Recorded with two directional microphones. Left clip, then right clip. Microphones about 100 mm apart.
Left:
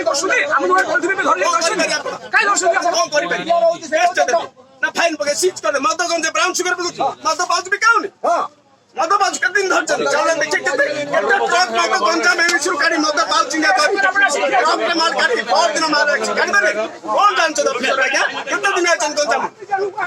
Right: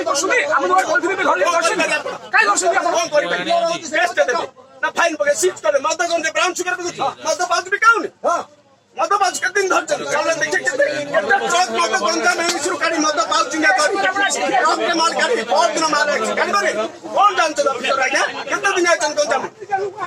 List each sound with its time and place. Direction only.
0.1 s speech: 30° left (ahead or behind)